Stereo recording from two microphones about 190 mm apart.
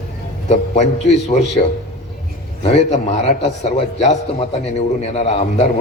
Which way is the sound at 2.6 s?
35° left (ahead or behind).